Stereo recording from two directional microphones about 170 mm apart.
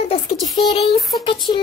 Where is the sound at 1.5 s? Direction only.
30° left (ahead or behind).